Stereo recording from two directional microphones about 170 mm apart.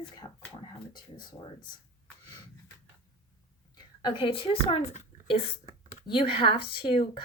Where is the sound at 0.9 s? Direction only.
25° left (ahead or behind).